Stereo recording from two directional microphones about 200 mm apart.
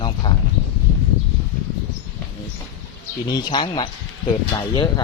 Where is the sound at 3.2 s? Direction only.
20° left (ahead or behind).